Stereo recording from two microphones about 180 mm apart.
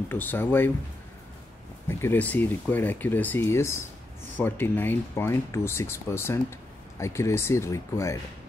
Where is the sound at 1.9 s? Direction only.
10° left (ahead or behind).